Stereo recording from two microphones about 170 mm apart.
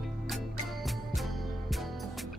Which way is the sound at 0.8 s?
Centre (ahead or behind).